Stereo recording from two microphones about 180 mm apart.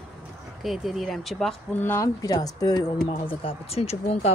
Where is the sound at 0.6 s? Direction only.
Centre (ahead or behind).